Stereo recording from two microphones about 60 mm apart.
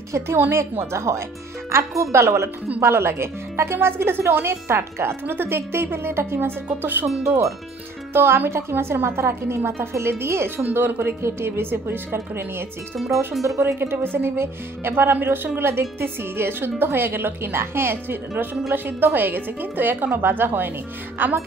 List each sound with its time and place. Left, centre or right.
0.4 s speech: right
7.2 s speech: right
8.1 s speech: right
10.6 s speech: right